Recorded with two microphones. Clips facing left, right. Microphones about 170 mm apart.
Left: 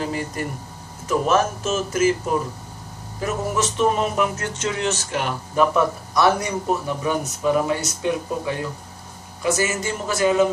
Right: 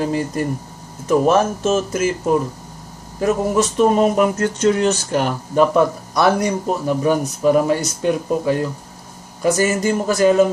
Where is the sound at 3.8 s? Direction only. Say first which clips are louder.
Right 6 dB; 40° right (ahead or behind).